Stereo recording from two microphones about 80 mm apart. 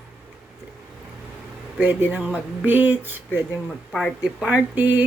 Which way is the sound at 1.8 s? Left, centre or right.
Right.